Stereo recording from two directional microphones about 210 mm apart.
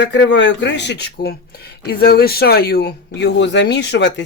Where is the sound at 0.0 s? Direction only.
55° left (ahead or behind).